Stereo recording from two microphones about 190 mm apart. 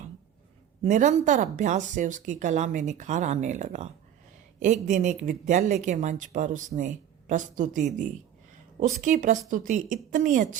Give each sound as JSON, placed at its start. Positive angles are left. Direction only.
{"t": 0.8, "sound": "speech", "side_deg": -40}